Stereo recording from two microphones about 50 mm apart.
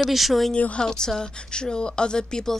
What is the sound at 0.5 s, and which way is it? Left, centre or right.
Speech, left.